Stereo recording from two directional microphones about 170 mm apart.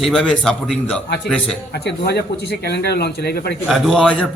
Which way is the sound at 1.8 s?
75° left (ahead or behind).